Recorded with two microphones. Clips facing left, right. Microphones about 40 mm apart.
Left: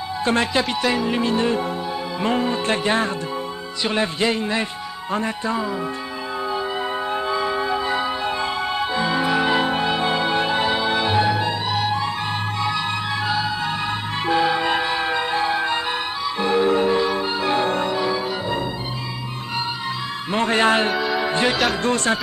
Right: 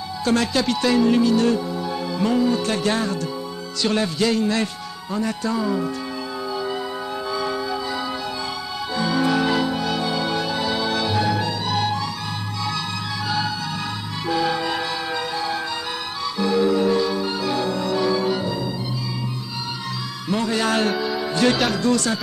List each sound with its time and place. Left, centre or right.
0.2 s speech: left
1.2 s speech: left
2.1 s music: left
3.8 s speech: left
7.2 s music: left
14.2 s music: left
17.9 s music: centre
20.2 s a man's voice: left
20.9 s music: centre
21.2 s music: left
21.5 s speech: centre
21.8 s music: left